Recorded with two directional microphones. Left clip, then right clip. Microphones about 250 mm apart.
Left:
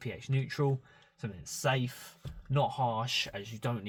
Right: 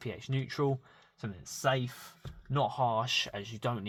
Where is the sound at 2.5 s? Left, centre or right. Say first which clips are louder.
Right 1 dB; right.